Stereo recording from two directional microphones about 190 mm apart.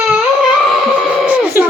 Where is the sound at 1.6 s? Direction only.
10° right (ahead or behind).